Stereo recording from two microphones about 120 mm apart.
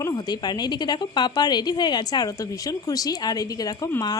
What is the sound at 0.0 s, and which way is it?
A woman's voice, 35° left (ahead or behind).